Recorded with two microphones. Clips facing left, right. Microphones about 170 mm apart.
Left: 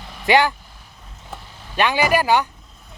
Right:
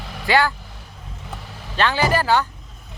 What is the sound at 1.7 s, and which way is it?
Speech, 15° left (ahead or behind).